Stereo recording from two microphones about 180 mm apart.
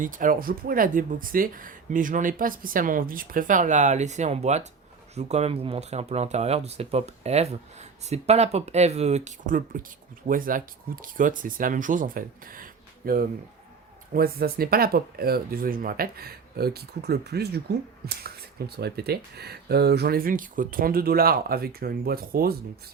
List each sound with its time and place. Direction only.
0.0 s speech: 50° right (ahead or behind)